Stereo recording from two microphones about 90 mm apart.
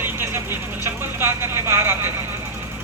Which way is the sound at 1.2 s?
25° right (ahead or behind).